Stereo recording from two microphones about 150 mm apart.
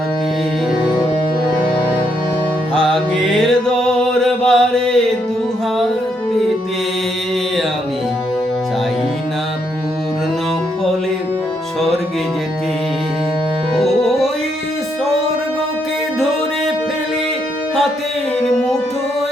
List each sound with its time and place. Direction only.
2.7 s music: 5° left (ahead or behind)
13.7 s music: centre (ahead or behind)